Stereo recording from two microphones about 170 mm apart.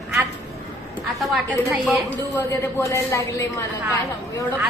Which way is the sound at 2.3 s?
15° left (ahead or behind).